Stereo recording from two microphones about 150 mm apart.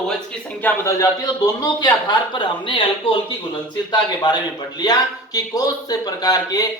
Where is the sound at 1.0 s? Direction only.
25° left (ahead or behind).